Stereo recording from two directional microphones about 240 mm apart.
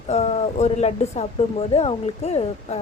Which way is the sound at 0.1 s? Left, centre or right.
Left.